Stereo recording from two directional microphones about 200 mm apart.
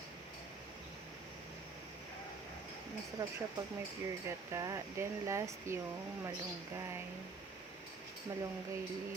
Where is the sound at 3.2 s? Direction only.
15° right (ahead or behind).